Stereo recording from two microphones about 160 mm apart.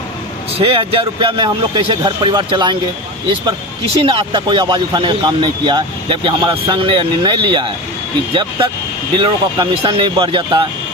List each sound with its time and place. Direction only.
0.5 s speech: 35° right (ahead or behind)
4.0 s speech: 35° right (ahead or behind)